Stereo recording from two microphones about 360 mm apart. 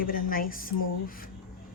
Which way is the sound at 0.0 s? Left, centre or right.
Left.